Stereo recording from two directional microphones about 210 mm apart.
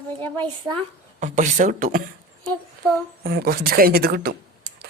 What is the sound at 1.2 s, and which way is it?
Speech, 35° right (ahead or behind).